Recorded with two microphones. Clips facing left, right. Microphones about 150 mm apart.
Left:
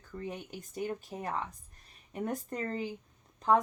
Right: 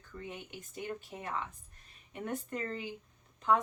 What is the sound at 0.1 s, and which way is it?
Speech, 40° left (ahead or behind).